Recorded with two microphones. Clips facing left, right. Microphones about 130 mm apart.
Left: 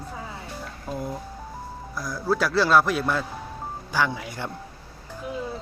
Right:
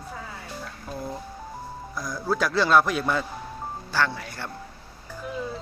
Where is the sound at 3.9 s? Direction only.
15° left (ahead or behind).